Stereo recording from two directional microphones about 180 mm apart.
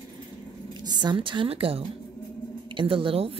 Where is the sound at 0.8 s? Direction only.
25° right (ahead or behind).